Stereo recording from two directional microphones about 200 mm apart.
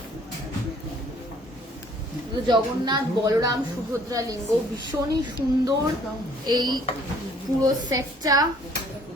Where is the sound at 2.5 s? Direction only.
20° right (ahead or behind).